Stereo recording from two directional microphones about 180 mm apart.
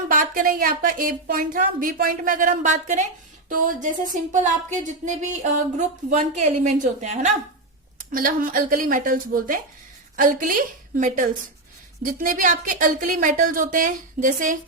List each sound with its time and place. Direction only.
0.1 s a woman's voice: 50° right (ahead or behind)